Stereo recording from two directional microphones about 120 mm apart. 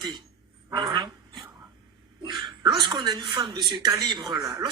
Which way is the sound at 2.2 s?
40° right (ahead or behind).